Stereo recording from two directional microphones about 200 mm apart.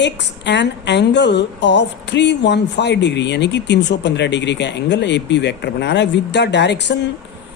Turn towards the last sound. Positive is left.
turn(degrees=60)  # may be behind; listen again after turning